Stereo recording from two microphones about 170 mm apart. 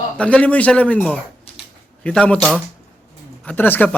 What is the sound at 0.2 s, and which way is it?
Speech, 5° left (ahead or behind).